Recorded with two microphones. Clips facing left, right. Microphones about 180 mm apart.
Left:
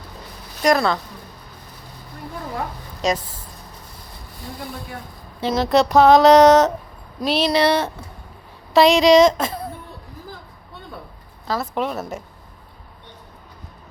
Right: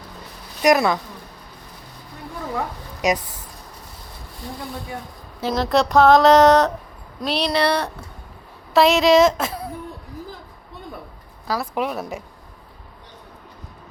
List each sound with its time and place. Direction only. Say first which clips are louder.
0.6 s speech: right 1 dB; 15° right (ahead or behind)
3.0 s speech: right 1 dB; 15° right (ahead or behind)
5.4 s speech: left 2 dB; centre (ahead or behind)
11.4 s speech: even; 5° right (ahead or behind)